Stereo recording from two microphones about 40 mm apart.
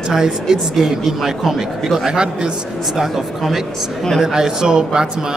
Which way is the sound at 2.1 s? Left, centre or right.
Centre.